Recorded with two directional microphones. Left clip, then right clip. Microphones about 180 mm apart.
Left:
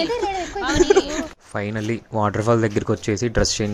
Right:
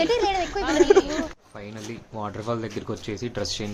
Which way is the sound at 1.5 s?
40° left (ahead or behind).